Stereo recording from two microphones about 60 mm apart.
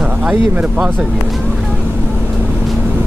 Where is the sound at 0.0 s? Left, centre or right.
Right.